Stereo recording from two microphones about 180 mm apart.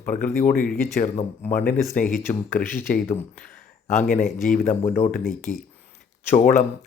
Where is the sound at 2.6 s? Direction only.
10° left (ahead or behind).